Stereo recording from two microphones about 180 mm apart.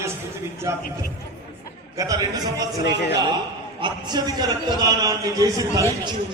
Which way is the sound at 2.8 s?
70° left (ahead or behind).